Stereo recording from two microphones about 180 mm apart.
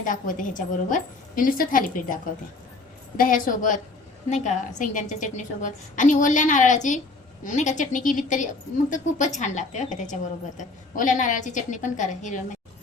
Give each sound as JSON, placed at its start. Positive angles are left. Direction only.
{"t": 0.0, "sound": "a woman's voice", "side_deg": 50}
{"t": 3.2, "sound": "a woman's voice", "side_deg": 50}